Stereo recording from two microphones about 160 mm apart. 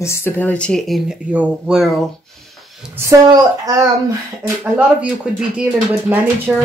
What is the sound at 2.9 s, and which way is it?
Speech, 20° right (ahead or behind).